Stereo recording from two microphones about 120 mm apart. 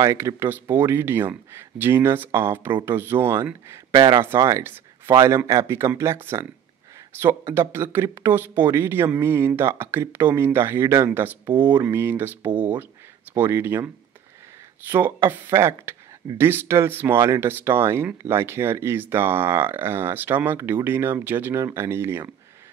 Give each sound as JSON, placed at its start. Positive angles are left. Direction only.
{"t": 0.0, "sound": "speech", "side_deg": -25}
{"t": 3.9, "sound": "speech", "side_deg": -45}
{"t": 4.2, "sound": "speech", "side_deg": -20}
{"t": 14.9, "sound": "speech", "side_deg": -15}